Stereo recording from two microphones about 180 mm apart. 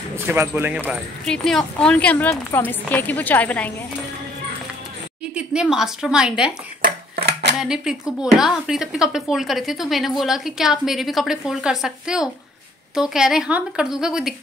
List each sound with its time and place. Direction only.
0.1 s speech: 15° right (ahead or behind)
1.2 s a woman's voice: 5° left (ahead or behind)
5.3 s a woman's voice: 5° right (ahead or behind)
6.8 s a sound: 60° right (ahead or behind)
7.5 s speech: 5° right (ahead or behind)